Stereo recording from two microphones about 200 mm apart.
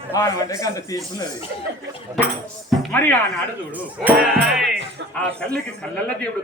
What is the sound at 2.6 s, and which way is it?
Speech, 10° left (ahead or behind).